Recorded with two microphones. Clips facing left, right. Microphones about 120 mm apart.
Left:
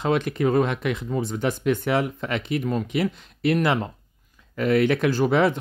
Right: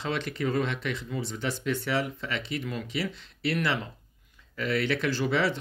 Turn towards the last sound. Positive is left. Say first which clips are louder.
# left 7 dB
turn(degrees=50)  # may be behind; listen again after turning